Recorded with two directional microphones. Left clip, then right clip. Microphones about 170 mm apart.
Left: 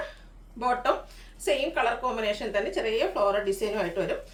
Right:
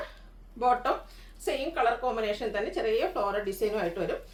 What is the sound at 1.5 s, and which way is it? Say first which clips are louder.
A woman's voice: left 2 dB; 10° left (ahead or behind).